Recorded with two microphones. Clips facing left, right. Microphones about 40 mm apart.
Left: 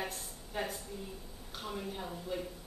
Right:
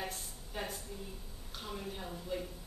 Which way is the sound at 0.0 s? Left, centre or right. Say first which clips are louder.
Left 2 dB; centre.